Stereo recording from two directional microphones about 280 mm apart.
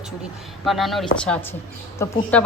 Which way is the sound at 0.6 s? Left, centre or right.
Centre.